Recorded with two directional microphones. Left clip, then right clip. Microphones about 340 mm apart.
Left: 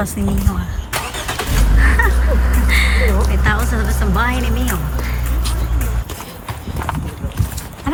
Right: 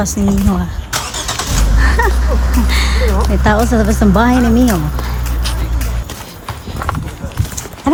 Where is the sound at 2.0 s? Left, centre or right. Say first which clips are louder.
Right 2 dB; centre.